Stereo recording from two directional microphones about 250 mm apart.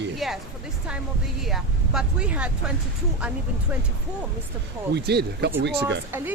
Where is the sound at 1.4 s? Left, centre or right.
Centre.